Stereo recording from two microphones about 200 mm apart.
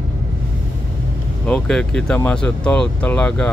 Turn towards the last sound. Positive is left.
turn(degrees=5)  # may be behind; listen again after turning